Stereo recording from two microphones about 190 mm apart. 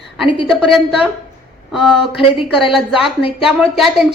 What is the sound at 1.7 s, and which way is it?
Speech, 5° right (ahead or behind).